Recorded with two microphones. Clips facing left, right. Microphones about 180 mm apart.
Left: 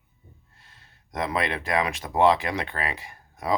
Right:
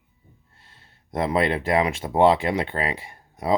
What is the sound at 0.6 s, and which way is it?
Speech, 25° right (ahead or behind).